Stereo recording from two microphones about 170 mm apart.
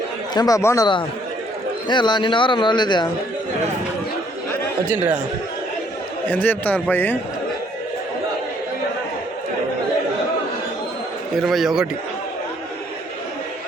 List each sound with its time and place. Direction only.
0.3 s speech: 20° left (ahead or behind)
1.9 s speech: 25° left (ahead or behind)
6.2 s a man's voice: 10° left (ahead or behind)
11.3 s a man's voice: centre (ahead or behind)